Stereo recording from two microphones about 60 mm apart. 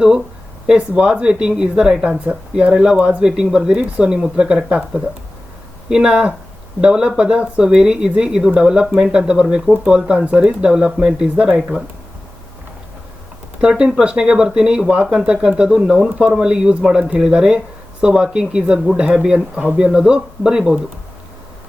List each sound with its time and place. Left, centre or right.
0.7 s speech: centre
5.9 s speech: centre
13.6 s speech: centre